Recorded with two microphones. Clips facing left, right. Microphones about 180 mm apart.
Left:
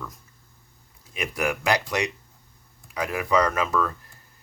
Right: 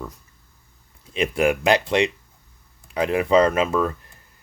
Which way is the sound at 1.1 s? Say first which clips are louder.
Right 7 dB; 25° right (ahead or behind).